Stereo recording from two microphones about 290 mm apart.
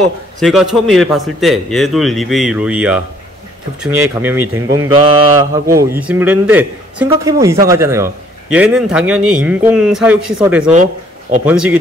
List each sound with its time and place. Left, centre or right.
0.4 s a man's voice: centre
10.7 s a sound: right
11.4 s a man's voice: centre